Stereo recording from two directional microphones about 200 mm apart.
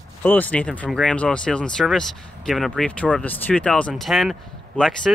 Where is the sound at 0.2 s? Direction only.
5° left (ahead or behind).